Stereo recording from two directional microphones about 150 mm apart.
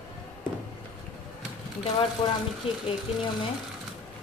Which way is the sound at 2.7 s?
35° left (ahead or behind).